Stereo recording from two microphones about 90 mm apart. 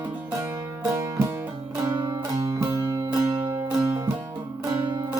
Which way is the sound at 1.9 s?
50° right (ahead or behind).